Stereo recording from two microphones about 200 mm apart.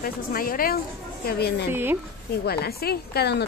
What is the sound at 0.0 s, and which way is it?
Speech, 45° left (ahead or behind).